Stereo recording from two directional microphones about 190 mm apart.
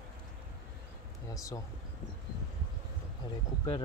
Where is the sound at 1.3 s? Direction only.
15° left (ahead or behind).